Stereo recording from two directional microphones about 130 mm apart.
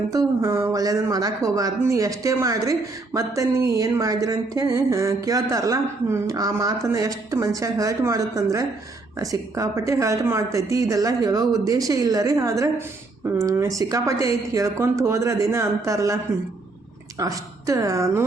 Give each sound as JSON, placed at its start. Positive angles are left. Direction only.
{"t": 0.1, "sound": "speech", "side_deg": -25}
{"t": 17.2, "sound": "speech", "side_deg": -25}